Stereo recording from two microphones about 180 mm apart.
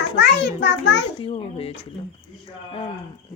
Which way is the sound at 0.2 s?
65° left (ahead or behind).